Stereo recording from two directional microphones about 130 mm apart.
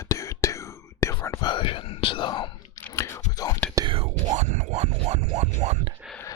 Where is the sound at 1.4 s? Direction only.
40° left (ahead or behind).